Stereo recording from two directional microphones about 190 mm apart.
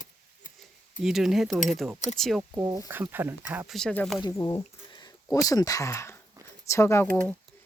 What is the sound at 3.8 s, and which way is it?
Speech, 5° left (ahead or behind).